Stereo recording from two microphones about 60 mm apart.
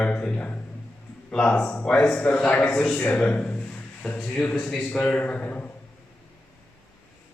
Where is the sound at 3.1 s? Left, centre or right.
Left.